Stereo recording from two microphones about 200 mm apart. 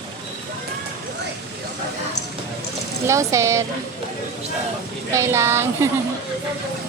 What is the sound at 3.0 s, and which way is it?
Speech, 15° right (ahead or behind).